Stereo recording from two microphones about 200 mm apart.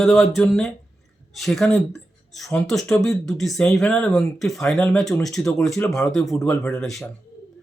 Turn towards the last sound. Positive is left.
turn(degrees=0)  # may be behind; listen again after turning